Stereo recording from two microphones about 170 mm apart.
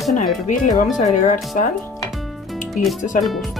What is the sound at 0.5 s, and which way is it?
Speech, 50° left (ahead or behind).